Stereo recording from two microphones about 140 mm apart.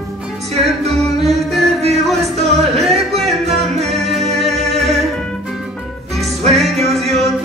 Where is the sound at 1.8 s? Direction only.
50° right (ahead or behind).